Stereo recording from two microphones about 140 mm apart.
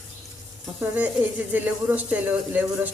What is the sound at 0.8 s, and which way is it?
A man's voice, 10° right (ahead or behind).